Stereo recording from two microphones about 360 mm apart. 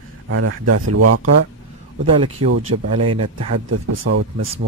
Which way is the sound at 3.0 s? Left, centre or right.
Right.